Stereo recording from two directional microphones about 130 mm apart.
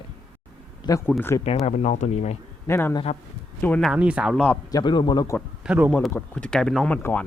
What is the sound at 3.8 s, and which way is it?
Speech, 10° right (ahead or behind).